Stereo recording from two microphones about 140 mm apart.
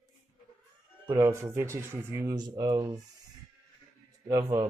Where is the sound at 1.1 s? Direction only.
20° right (ahead or behind).